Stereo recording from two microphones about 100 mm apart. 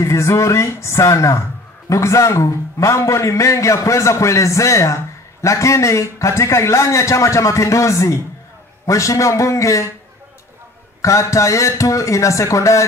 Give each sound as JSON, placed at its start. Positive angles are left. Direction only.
{"t": 0.0, "sound": "a man's voice", "side_deg": 30}
{"t": 11.0, "sound": "a man's voice", "side_deg": 30}